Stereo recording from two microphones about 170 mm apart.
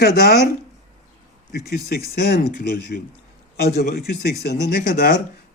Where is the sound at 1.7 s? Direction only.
65° left (ahead or behind).